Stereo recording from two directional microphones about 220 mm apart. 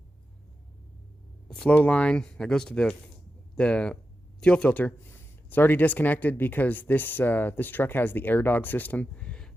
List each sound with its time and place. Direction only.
1.5 s speech: 5° left (ahead or behind)